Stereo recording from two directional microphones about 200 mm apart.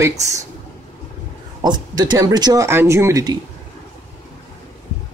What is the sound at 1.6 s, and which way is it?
A woman's voice, 20° right (ahead or behind).